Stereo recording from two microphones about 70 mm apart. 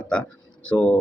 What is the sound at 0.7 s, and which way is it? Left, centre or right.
Speech, centre.